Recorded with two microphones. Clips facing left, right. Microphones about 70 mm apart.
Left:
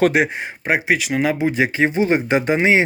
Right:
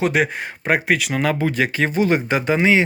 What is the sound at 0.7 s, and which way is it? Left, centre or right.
Speech, centre.